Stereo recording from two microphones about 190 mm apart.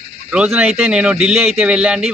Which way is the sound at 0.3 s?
5° right (ahead or behind).